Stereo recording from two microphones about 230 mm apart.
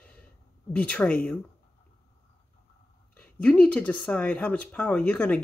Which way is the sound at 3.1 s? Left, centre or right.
Centre.